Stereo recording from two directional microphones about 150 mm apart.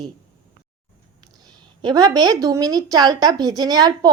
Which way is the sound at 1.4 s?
30° right (ahead or behind).